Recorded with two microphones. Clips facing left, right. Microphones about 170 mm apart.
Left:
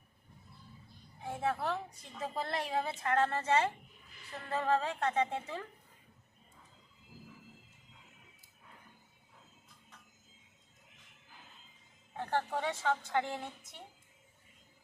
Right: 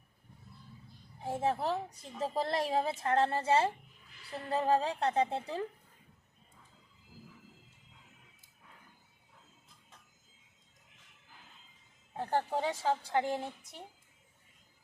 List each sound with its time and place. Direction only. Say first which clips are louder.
1.2 s a woman's voice: right 3 dB; 30° right (ahead or behind)
12.1 s a woman's voice: right 2 dB; 35° right (ahead or behind)